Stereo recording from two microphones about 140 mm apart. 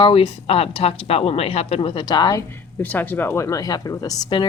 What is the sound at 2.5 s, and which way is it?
Speech, 15° left (ahead or behind).